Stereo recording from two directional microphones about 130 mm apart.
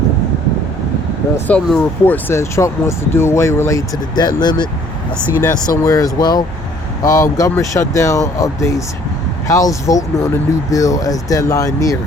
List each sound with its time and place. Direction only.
1.5 s speech: 10° left (ahead or behind); by 11.9 s 25° left (ahead or behind)